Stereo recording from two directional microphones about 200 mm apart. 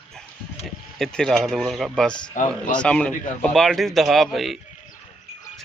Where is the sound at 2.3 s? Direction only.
40° left (ahead or behind).